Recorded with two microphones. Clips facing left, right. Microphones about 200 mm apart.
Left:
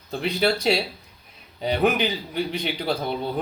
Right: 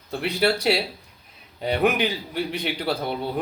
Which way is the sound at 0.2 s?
5° right (ahead or behind).